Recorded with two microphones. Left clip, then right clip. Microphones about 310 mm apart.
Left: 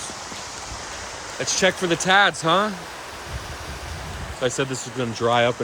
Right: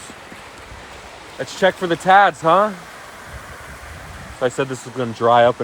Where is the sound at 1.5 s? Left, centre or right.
Centre.